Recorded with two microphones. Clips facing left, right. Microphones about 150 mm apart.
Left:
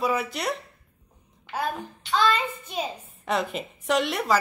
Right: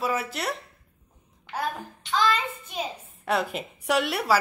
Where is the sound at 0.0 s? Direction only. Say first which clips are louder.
Left 2 dB; centre (ahead or behind).